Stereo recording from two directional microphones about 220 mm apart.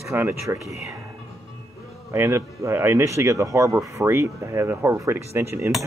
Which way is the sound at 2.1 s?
10° right (ahead or behind).